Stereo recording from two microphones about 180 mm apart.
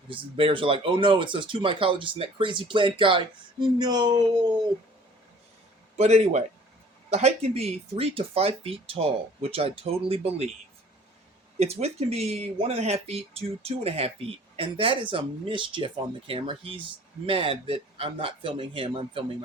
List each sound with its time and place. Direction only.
0.3 s speech: 30° right (ahead or behind)
6.0 s speech: 35° right (ahead or behind)
11.6 s speech: 35° right (ahead or behind)